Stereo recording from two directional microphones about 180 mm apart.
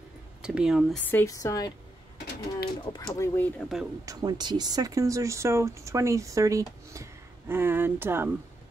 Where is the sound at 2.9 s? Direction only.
15° left (ahead or behind).